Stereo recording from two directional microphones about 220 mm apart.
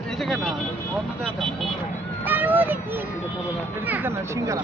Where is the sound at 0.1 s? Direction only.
Centre (ahead or behind); by 4.6 s 15° right (ahead or behind).